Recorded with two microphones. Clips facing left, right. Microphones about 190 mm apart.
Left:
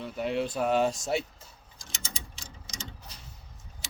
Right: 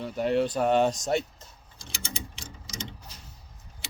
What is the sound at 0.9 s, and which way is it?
Speech, 40° right (ahead or behind).